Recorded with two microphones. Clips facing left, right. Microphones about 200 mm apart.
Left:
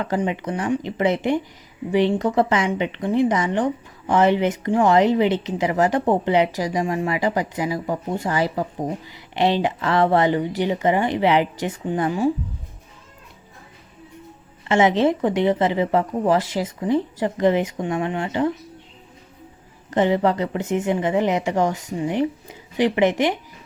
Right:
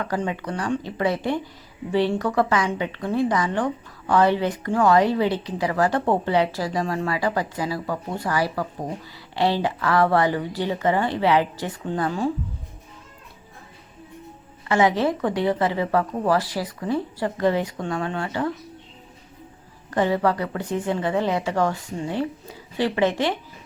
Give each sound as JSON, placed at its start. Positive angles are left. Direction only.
{"t": 0.0, "sound": "a woman's voice", "side_deg": 20}
{"t": 14.7, "sound": "a woman's voice", "side_deg": 20}
{"t": 19.9, "sound": "a woman's voice", "side_deg": 20}